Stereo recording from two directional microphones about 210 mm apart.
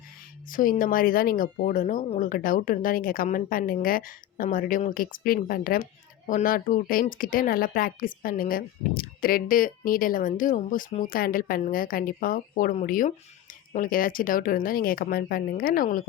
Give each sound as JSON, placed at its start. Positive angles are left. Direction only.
{"t": 0.4, "sound": "speech", "side_deg": 40}